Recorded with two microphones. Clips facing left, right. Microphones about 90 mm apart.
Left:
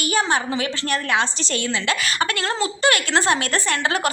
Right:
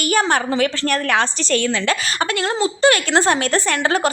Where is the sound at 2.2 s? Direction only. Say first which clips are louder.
Right 3 dB; 25° right (ahead or behind).